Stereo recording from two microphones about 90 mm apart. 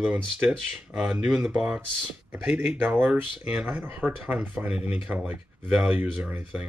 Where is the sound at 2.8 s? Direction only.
20° right (ahead or behind).